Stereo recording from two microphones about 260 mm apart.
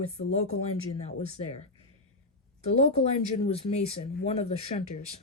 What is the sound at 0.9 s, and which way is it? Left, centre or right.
Speech, left.